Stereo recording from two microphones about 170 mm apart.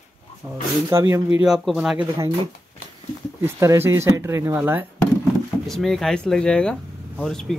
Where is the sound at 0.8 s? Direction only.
15° right (ahead or behind).